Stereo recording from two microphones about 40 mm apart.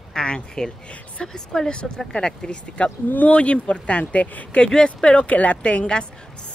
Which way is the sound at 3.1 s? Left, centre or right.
Left.